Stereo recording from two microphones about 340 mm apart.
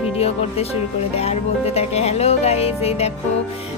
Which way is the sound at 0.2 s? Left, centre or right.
Centre.